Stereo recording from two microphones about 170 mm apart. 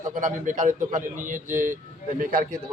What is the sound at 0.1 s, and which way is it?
A man's voice, 50° right (ahead or behind).